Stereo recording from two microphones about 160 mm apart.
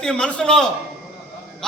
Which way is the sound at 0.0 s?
5° left (ahead or behind).